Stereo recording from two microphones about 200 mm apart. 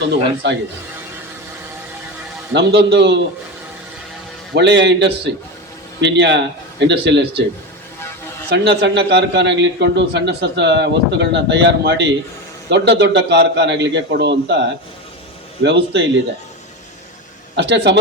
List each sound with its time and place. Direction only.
0.4 s a man's voice: 60° right (ahead or behind)
2.5 s a man's voice: 60° right (ahead or behind)
4.5 s a man's voice: 60° right (ahead or behind)
8.4 s a man's voice: 55° right (ahead or behind)
17.5 s a man's voice: 60° right (ahead or behind)